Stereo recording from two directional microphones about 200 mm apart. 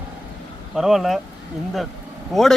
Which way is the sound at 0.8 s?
Centre (ahead or behind).